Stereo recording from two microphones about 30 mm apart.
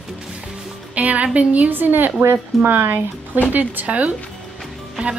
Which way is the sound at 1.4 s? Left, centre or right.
Right.